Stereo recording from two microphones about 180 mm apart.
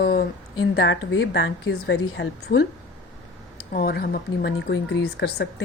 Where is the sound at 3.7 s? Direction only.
55° left (ahead or behind).